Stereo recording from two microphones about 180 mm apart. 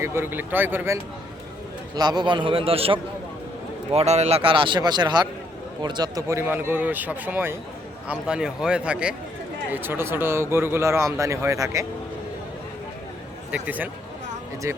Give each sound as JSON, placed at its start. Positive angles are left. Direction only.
{"t": 0.0, "sound": "speech", "side_deg": -15}
{"t": 2.0, "sound": "a man's voice", "side_deg": -25}
{"t": 13.5, "sound": "speech", "side_deg": -10}